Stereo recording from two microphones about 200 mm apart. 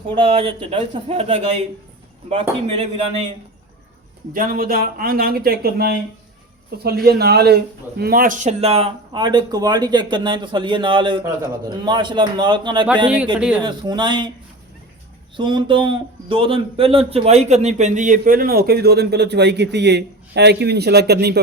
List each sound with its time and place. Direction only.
0.2 s speech: 25° right (ahead or behind)
4.3 s a man's voice: 45° right (ahead or behind); by 14.3 s 25° right (ahead or behind)
15.4 s a man's voice: 25° right (ahead or behind); by 21.4 s 55° right (ahead or behind)